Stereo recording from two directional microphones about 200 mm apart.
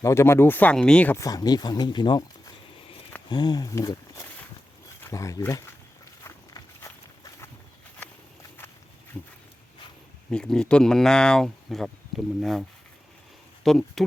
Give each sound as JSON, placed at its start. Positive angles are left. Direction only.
{"t": 0.0, "sound": "speech", "side_deg": 15}
{"t": 6.2, "sound": "walk", "side_deg": 15}
{"t": 9.2, "sound": "dog", "side_deg": 5}
{"t": 10.2, "sound": "speech", "side_deg": 5}
{"t": 13.7, "sound": "speech", "side_deg": 0}